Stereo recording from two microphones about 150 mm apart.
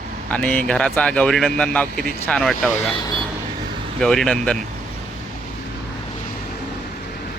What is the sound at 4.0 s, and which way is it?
Speech, 5° left (ahead or behind).